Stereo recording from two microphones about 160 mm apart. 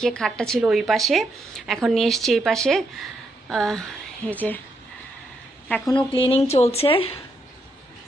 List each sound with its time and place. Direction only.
0.0 s a woman's voice: centre (ahead or behind)
5.6 s speech: 5° left (ahead or behind)
6.1 s speech: 35° left (ahead or behind)